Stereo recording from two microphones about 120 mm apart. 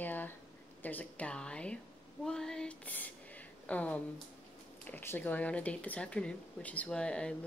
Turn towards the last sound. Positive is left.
turn(degrees=10)  # may be behind; listen again after turning